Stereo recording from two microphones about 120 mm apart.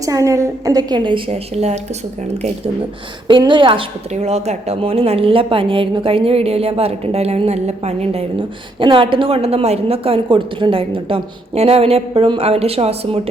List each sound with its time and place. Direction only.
0.0 s a woman's voice: 25° right (ahead or behind)
1.3 s speech: 70° right (ahead or behind)
3.2 s a woman's voice: 40° right (ahead or behind)
4.1 s a woman's voice: 65° right (ahead or behind)
8.8 s a woman's voice: 45° right (ahead or behind)